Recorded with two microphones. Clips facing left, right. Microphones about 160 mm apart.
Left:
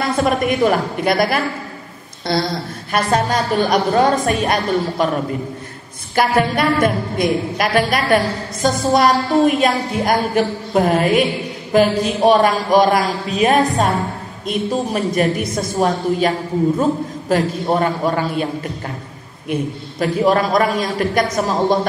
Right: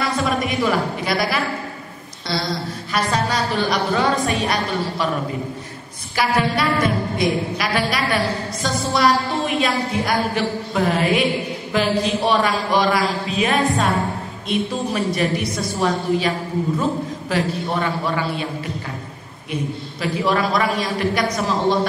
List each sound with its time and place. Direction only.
0.0 s a woman's voice: 50° left (ahead or behind)
6.1 s a woman's voice: 50° left (ahead or behind)